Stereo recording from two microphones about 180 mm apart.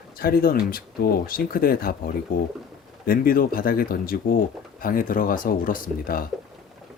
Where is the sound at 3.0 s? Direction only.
55° left (ahead or behind).